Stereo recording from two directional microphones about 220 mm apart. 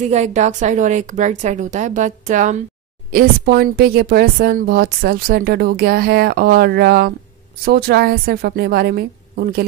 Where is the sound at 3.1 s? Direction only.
45° right (ahead or behind).